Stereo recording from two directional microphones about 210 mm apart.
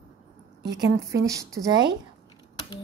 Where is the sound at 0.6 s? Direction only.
55° right (ahead or behind).